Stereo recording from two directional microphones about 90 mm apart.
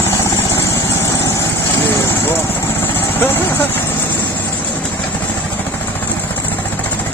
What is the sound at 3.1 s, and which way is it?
Vehicle, 25° left (ahead or behind).